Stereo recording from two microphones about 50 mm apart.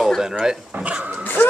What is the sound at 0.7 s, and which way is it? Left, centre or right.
Speech, right.